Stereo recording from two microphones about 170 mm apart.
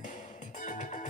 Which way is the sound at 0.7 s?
50° left (ahead or behind).